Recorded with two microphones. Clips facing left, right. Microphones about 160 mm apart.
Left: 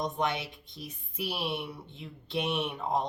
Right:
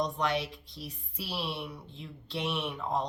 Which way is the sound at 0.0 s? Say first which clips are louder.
Even; 20° left (ahead or behind).